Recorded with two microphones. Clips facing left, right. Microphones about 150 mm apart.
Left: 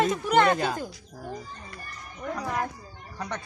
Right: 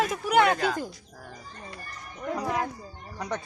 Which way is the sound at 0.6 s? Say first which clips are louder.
Right 1 dB; 20° left (ahead or behind).